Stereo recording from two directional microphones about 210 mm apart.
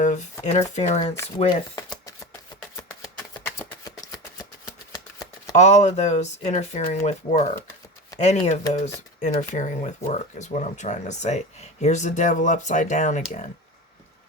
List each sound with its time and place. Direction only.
0.0 s shuffling cards: 35° left (ahead or behind)
0.4 s speech: 30° left (ahead or behind)
1.7 s a sound: 15° left (ahead or behind)
3.4 s shuffling cards: 15° left (ahead or behind)
5.5 s speech: 35° left (ahead or behind)